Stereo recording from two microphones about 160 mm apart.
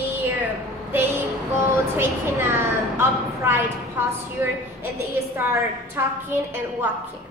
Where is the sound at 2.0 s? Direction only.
15° right (ahead or behind).